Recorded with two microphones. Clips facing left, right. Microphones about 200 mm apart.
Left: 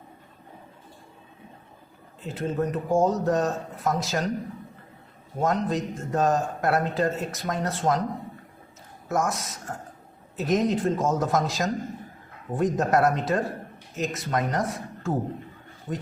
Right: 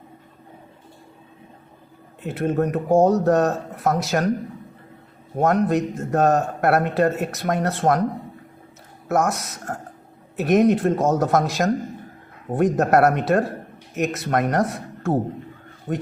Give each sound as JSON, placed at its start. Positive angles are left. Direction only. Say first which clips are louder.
{"t": 2.2, "sound": "a man's voice", "louder": "right 5 dB", "side_deg": -65}
{"t": 5.4, "sound": "a man's voice", "louder": "right 6 dB", "side_deg": -65}
{"t": 9.0, "sound": "a man's voice", "louder": "right 5 dB", "side_deg": -65}